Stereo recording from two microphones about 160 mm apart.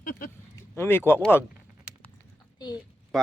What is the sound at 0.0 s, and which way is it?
Speech, 60° left (ahead or behind).